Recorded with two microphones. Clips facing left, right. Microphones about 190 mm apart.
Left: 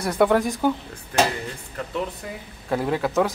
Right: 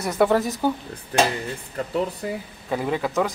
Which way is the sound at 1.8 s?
35° right (ahead or behind).